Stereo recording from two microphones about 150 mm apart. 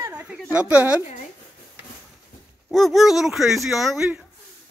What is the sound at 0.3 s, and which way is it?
Speech, 10° right (ahead or behind).